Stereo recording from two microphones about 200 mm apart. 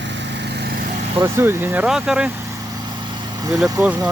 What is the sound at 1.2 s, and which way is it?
Speech, 10° right (ahead or behind).